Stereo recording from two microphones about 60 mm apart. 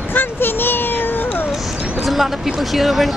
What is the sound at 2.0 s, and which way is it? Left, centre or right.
Speech, centre.